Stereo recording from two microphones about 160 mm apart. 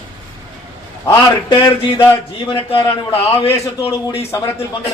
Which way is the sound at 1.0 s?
20° left (ahead or behind).